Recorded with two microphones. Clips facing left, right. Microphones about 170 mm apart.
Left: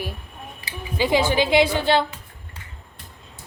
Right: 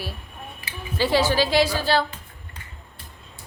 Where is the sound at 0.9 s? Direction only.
15° left (ahead or behind).